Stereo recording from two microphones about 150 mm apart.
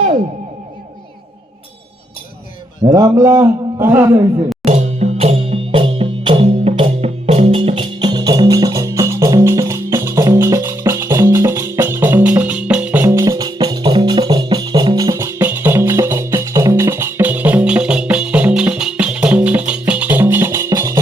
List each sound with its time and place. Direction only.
2.8 s a man's voice: 20° right (ahead or behind)
4.6 s music: 45° right (ahead or behind); by 13.1 s 10° right (ahead or behind)
13.1 s music: 20° right (ahead or behind)